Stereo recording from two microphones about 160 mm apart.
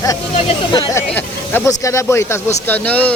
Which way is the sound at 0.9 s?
15° left (ahead or behind).